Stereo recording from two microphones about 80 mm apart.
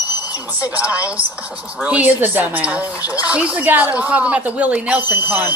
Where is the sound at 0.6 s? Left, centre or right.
Right.